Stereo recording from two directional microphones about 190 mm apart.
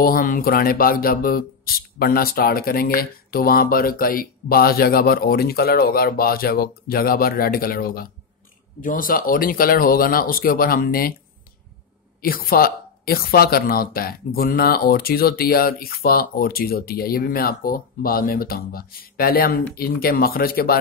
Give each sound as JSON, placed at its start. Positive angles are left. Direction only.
{"t": 0.0, "sound": "speech", "side_deg": 50}
{"t": 12.2, "sound": "speech", "side_deg": 50}